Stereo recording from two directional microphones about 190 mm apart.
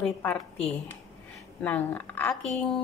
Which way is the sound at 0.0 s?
5° left (ahead or behind).